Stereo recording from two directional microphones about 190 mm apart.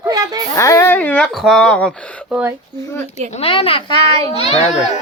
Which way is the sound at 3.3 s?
30° left (ahead or behind).